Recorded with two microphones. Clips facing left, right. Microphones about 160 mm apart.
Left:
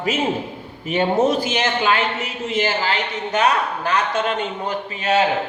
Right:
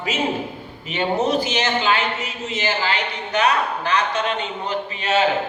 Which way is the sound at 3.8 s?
50° left (ahead or behind).